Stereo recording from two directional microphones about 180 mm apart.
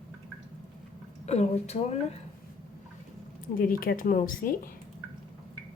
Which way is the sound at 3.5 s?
50° left (ahead or behind).